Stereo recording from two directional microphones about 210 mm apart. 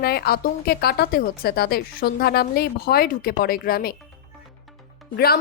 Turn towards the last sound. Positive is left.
turn(degrees=45)  # may be behind; listen again after turning